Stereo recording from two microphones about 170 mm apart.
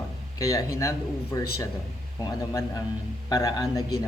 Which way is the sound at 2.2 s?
20° left (ahead or behind).